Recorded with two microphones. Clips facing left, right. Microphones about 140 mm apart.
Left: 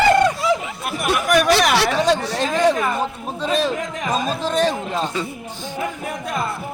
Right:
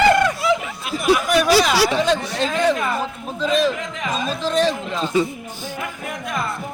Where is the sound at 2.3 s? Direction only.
40° left (ahead or behind).